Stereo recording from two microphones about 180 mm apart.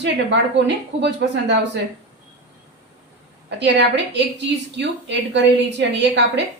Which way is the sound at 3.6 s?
75° right (ahead or behind).